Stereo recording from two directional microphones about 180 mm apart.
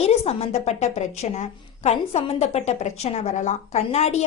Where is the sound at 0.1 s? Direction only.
35° left (ahead or behind).